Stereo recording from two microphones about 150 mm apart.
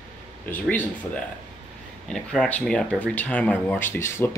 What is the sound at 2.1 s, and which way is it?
Speech, 5° left (ahead or behind).